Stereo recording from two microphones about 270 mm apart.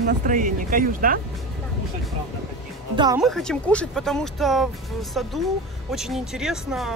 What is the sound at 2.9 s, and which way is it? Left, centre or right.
Speech, centre.